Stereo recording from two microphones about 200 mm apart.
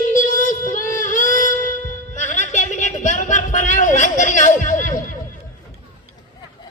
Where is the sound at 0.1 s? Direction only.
40° left (ahead or behind).